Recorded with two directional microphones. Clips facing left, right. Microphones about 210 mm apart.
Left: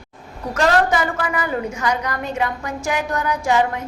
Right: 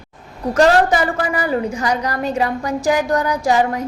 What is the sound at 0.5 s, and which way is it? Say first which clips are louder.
A woman's voice: right 4 dB; 35° right (ahead or behind).